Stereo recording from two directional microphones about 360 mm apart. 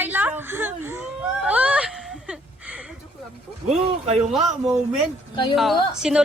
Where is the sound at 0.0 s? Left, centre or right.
Centre.